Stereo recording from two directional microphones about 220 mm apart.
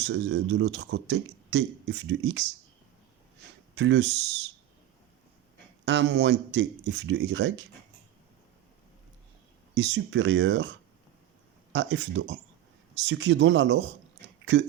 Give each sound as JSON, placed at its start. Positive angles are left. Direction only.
{"t": 0.0, "sound": "speech", "side_deg": -55}
{"t": 3.8, "sound": "speech", "side_deg": -55}
{"t": 5.8, "sound": "speech", "side_deg": -55}
{"t": 9.7, "sound": "speech", "side_deg": -50}
{"t": 11.7, "sound": "speech", "side_deg": -55}